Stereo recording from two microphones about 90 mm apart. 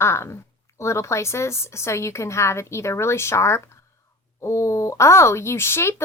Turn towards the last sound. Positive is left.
turn(degrees=30)  # may be behind; listen again after turning